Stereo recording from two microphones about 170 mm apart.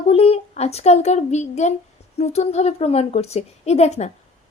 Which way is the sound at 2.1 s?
40° left (ahead or behind).